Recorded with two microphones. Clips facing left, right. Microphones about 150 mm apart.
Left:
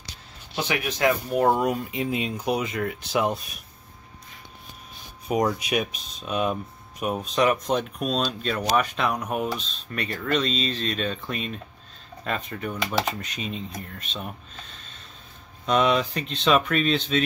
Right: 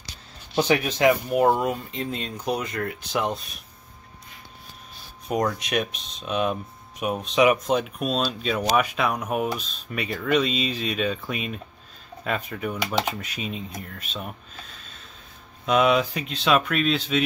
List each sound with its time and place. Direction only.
0.6 s speech: 30° right (ahead or behind)
1.5 s speech: 5° left (ahead or behind)
5.3 s speech: 5° left (ahead or behind)